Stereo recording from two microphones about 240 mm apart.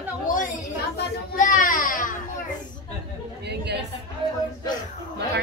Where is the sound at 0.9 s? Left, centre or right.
Left.